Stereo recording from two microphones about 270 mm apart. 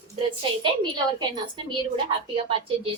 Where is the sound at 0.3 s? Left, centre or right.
Centre.